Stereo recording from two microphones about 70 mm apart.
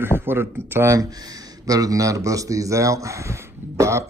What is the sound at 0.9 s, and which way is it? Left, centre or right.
Speech, right.